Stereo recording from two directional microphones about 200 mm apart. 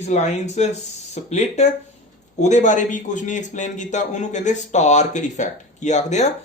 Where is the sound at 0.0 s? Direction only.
35° left (ahead or behind).